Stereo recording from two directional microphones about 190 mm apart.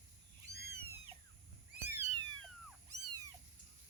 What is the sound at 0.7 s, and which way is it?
Cat, 15° right (ahead or behind).